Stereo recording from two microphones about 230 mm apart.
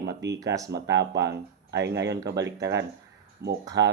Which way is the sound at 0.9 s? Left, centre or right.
Right.